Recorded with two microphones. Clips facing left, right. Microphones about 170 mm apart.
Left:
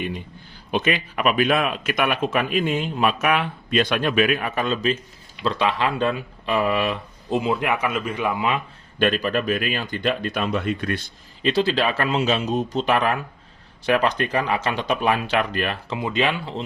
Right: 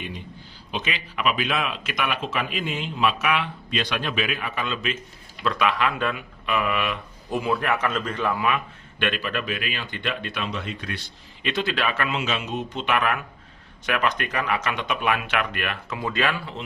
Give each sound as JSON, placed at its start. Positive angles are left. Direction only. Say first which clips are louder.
{"t": 0.7, "sound": "speech", "louder": "left 8 dB", "side_deg": 50}
{"t": 7.3, "sound": "a man's voice", "louder": "left 2 dB", "side_deg": 20}
{"t": 8.4, "sound": "speech", "louder": "left 1 dB", "side_deg": 30}
{"t": 11.4, "sound": "speech", "louder": "left 5 dB", "side_deg": 30}
{"t": 16.0, "sound": "speech", "louder": "left 2 dB", "side_deg": 20}